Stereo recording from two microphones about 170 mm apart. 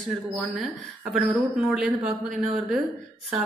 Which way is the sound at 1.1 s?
5° right (ahead or behind).